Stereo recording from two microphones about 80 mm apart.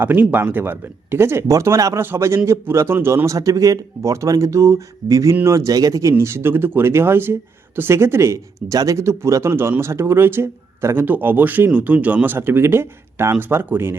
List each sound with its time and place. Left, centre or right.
0.0 s speech: right